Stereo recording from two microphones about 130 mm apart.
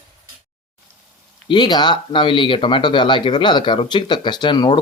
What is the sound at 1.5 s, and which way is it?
Speech, 35° left (ahead or behind).